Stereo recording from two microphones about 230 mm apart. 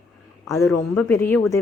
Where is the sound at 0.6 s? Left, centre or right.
Centre.